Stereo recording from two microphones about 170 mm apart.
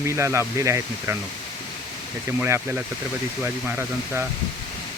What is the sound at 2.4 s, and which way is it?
Speech, 10° right (ahead or behind).